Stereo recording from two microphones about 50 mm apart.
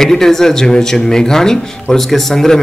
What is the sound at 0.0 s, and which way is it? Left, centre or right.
Speech, centre.